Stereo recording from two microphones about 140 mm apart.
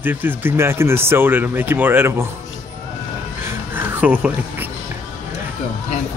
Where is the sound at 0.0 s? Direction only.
15° right (ahead or behind).